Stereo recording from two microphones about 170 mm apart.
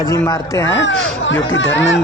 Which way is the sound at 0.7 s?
90° left.